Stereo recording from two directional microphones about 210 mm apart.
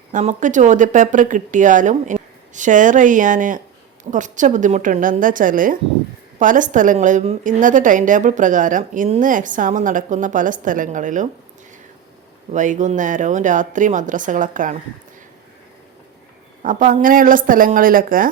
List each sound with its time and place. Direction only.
0.1 s a woman's voice: 35° right (ahead or behind)
12.5 s a woman's voice: 35° right (ahead or behind)
16.6 s a woman's voice: 40° right (ahead or behind)